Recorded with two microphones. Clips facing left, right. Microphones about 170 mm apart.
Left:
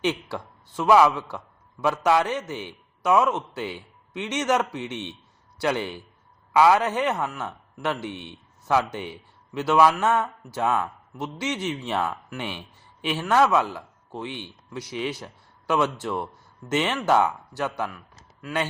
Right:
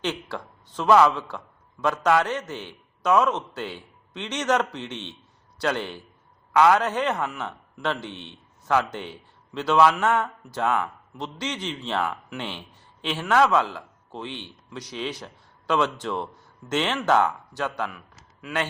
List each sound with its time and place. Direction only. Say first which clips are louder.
0.0 s a man's voice: left 3 dB; 10° left (ahead or behind)